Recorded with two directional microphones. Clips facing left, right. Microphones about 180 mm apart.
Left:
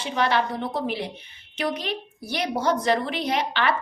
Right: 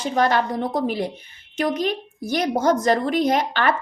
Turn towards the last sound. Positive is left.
turn(degrees=-45)  # may be behind; listen again after turning